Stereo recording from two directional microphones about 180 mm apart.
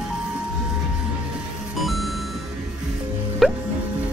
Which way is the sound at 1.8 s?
Centre (ahead or behind).